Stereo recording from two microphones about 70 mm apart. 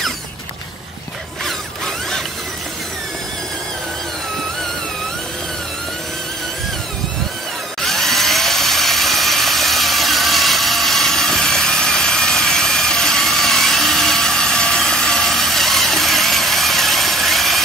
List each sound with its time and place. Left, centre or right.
7.8 s tools: centre